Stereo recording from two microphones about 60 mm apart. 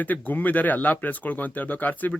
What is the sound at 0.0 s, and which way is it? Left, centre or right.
Speech, left.